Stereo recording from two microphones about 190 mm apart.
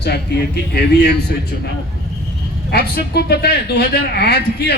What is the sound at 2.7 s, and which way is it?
Speech, 55° left (ahead or behind).